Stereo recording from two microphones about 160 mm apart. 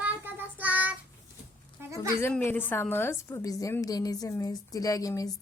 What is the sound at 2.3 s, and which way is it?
A woman's voice, 10° left (ahead or behind).